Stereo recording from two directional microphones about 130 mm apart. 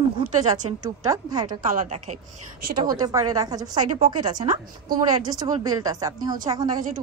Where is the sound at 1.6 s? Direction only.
80° right.